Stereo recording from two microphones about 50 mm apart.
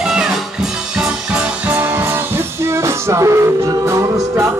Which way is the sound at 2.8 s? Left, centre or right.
Right.